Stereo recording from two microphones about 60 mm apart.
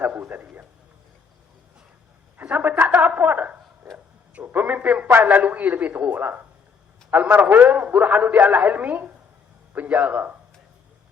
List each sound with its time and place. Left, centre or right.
0.0 s a man's voice: right
2.4 s a man's voice: right